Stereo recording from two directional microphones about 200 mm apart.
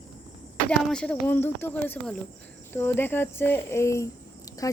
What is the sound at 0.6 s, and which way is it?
Speech, 5° left (ahead or behind).